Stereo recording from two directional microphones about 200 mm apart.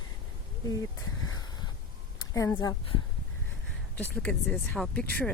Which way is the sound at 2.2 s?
15° left (ahead or behind).